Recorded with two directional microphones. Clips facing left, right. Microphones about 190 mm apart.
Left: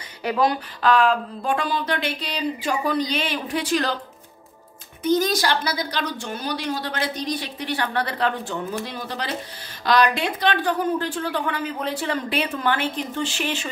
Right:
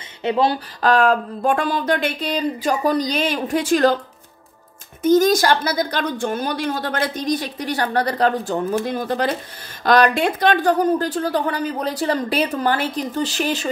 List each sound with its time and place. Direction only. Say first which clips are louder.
0.2 s speech: right 3 dB; 25° right (ahead or behind)
0.8 s a woman's voice: right 3 dB; 45° right (ahead or behind)
5.0 s a woman's voice: right 6 dB; 45° right (ahead or behind)